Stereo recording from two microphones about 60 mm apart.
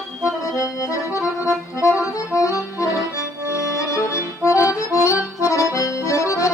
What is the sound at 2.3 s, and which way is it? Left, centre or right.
Accordion, left.